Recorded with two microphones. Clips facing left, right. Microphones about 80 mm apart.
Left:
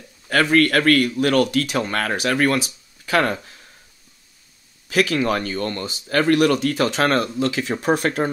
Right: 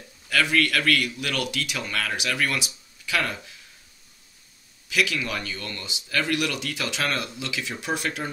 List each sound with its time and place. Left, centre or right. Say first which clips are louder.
0.3 s speech: left 6 dB; left
4.8 s speech: left 7 dB; left